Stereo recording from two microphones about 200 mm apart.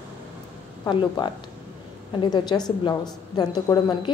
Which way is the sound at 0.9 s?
20° left (ahead or behind).